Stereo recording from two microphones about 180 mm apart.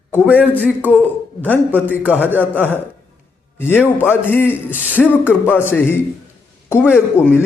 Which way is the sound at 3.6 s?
10° left (ahead or behind).